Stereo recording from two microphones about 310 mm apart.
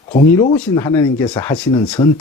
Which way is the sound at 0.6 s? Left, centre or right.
Centre.